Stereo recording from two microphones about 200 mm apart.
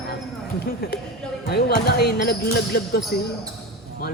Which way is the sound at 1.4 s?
50° left (ahead or behind).